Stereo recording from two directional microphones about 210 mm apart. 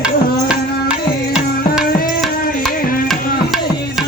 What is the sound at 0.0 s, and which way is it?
Music, 5° right (ahead or behind).